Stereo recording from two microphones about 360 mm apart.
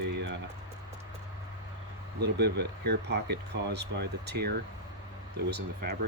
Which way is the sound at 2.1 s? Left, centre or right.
Right.